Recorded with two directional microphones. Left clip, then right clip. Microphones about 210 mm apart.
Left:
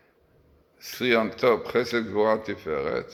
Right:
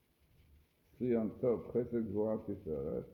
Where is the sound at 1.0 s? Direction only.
55° left (ahead or behind).